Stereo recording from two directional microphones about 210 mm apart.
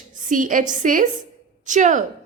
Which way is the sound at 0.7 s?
40° right (ahead or behind).